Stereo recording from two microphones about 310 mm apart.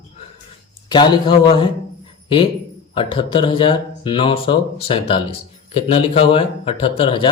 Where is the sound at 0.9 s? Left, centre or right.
Centre.